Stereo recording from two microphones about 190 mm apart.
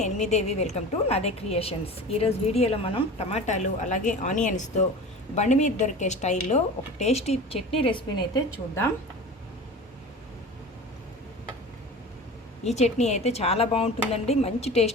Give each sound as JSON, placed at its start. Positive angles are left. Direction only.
{"t": 0.0, "sound": "a woman's voice", "side_deg": 35}
{"t": 12.6, "sound": "a woman's voice", "side_deg": 35}